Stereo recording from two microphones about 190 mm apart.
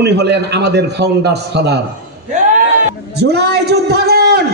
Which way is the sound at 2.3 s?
40° right (ahead or behind).